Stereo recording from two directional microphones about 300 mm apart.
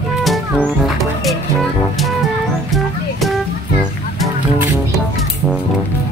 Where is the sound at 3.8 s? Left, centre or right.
Centre.